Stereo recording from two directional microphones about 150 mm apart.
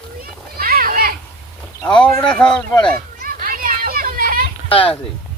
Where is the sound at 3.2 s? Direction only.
70° right (ahead or behind).